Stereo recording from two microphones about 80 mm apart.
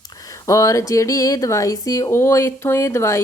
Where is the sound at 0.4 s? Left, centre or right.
Left.